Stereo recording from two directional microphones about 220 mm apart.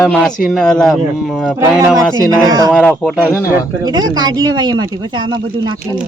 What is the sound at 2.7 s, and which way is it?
Speech, centre (ahead or behind).